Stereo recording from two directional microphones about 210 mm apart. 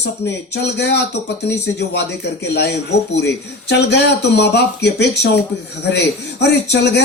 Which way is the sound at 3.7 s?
55° left (ahead or behind).